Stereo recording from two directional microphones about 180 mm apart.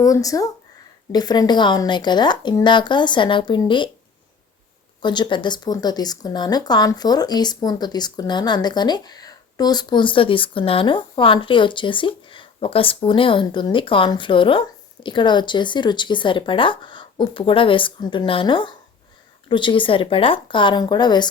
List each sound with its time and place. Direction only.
0.0 s speech: 20° left (ahead or behind)
5.0 s speech: 25° left (ahead or behind)